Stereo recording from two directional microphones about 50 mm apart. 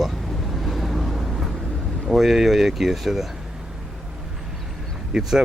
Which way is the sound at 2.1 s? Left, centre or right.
Centre.